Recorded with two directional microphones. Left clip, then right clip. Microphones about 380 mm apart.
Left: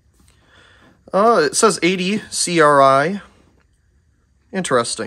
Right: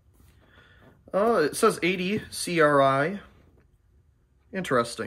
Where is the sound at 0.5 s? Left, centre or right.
Centre.